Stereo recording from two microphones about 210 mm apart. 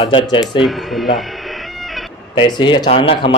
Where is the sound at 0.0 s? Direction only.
20° left (ahead or behind).